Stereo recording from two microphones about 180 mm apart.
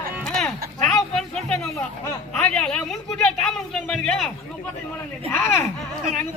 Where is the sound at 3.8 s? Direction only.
5° left (ahead or behind).